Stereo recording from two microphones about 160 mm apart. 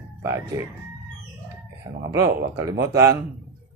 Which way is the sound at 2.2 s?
20° right (ahead or behind).